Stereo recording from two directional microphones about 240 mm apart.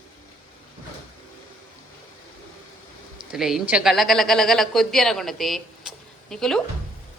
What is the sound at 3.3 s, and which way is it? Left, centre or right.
A woman's voice, centre.